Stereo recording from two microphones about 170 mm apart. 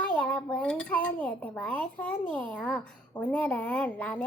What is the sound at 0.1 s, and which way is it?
A woman's voice, 5° left (ahead or behind).